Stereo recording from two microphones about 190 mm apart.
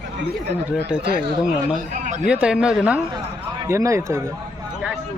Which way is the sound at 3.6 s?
15° right (ahead or behind).